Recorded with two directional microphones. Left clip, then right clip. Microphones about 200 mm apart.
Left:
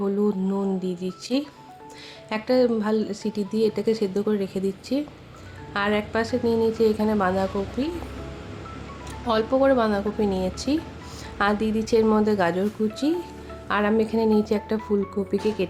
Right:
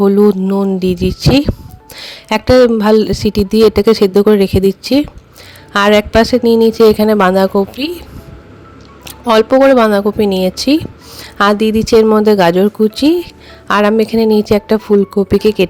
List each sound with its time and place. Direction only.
0.0 s a woman's voice: 45° right (ahead or behind)
9.0 s a woman's voice: 45° right (ahead or behind)